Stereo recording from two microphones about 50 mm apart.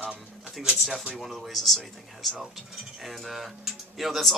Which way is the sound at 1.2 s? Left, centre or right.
Centre.